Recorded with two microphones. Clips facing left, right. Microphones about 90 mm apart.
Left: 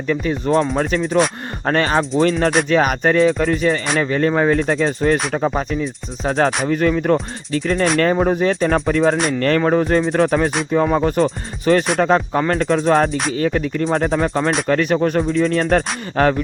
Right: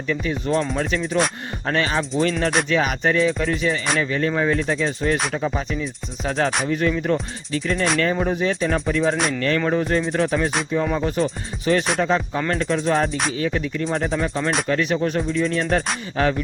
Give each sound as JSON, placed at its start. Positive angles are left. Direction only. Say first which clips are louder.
{"t": 0.1, "sound": "speech", "louder": "left 5 dB", "side_deg": 40}
{"t": 1.6, "sound": "music", "louder": "left 5 dB", "side_deg": 45}
{"t": 3.9, "sound": "speech", "louder": "left 5 dB", "side_deg": 40}
{"t": 6.7, "sound": "music", "louder": "left 5 dB", "side_deg": 45}
{"t": 9.6, "sound": "speech", "louder": "left 5 dB", "side_deg": 45}
{"t": 10.7, "sound": "music", "louder": "left 5 dB", "side_deg": 45}
{"t": 12.4, "sound": "speech", "louder": "left 5 dB", "side_deg": 40}
{"t": 13.3, "sound": "music", "louder": "left 5 dB", "side_deg": 45}
{"t": 15.3, "sound": "speech", "louder": "left 5 dB", "side_deg": 40}
{"t": 16.2, "sound": "music", "louder": "left 5 dB", "side_deg": 50}